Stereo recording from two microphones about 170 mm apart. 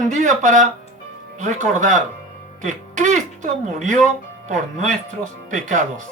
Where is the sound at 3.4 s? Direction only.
45° right (ahead or behind).